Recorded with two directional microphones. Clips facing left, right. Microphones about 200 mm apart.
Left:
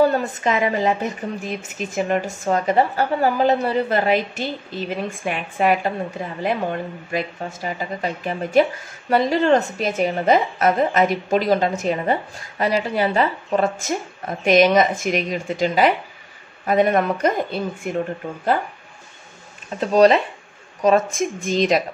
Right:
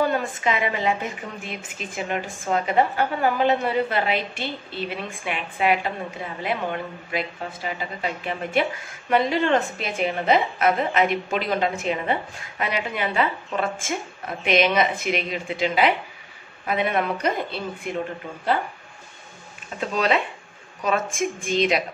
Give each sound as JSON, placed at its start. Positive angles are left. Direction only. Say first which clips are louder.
{"t": 0.1, "sound": "a woman's voice", "louder": "left 3 dB", "side_deg": 40}
{"t": 19.9, "sound": "a woman's voice", "louder": "left 9 dB", "side_deg": 40}